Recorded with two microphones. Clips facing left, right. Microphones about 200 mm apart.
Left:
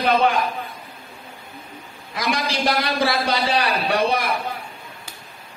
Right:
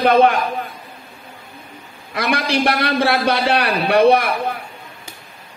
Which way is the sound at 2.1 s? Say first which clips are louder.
Right 5 dB; 65° right (ahead or behind).